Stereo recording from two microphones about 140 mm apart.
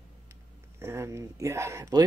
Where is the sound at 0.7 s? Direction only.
20° right (ahead or behind).